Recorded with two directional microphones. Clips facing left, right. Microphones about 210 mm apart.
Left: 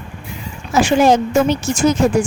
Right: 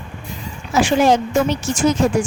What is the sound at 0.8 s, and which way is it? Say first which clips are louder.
Speech: left 2 dB; 45° left (ahead or behind).